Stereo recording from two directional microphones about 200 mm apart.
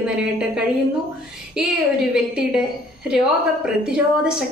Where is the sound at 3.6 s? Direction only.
5° right (ahead or behind).